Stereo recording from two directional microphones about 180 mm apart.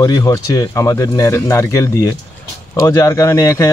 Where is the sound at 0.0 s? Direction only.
20° left (ahead or behind).